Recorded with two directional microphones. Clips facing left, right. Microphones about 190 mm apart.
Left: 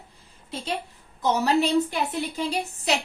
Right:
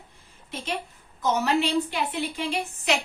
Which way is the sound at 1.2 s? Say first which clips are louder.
Left 2 dB; 35° left (ahead or behind).